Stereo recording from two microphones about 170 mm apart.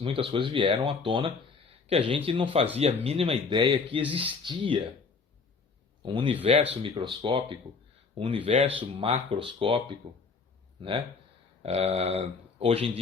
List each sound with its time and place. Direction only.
0.0 s speech: 30° right (ahead or behind)
6.0 s speech: 30° right (ahead or behind)